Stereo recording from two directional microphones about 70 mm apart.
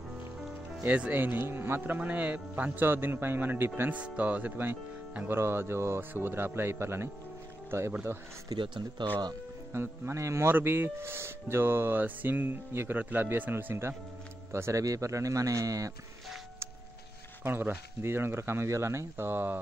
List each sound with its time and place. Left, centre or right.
0.8 s speech: right
3.9 s speech: centre
8.5 s speech: right
9.7 s speech: right
14.5 s speech: right
17.4 s speech: right